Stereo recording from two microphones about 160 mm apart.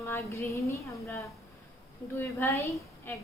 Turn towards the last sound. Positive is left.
turn(degrees=15)  # may be behind; listen again after turning